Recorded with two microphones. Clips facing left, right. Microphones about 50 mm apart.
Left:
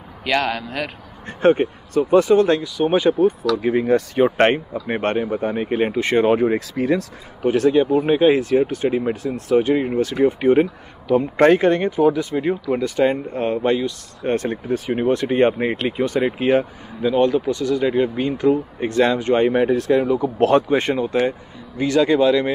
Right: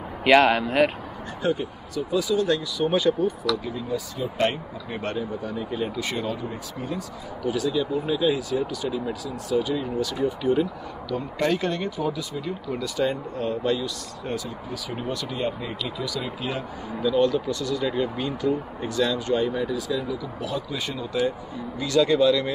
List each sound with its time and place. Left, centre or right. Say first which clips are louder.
0.4 s speech: right 4 dB; right
1.4 s speech: left 10 dB; left
3.3 s speech: left 7 dB; left
3.7 s speech: left 12 dB; left
6.3 s speech: left 14 dB; left
7.4 s speech: left 9 dB; left
14.3 s speech: left 11 dB; left
15.3 s speech: left 11 dB; left
16.1 s speech: left 12 dB; left